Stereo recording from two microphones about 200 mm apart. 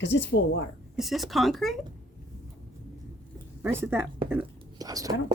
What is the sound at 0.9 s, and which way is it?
Speech, centre (ahead or behind).